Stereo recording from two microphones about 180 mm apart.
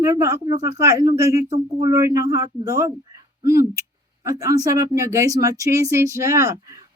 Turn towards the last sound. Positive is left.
turn(degrees=-20)  # may be behind; listen again after turning